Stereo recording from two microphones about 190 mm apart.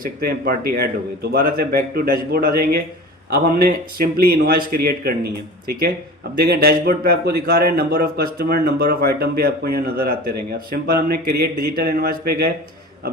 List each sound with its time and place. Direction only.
0.0 s speech: 50° right (ahead or behind)
6.4 s a man's voice: 55° right (ahead or behind)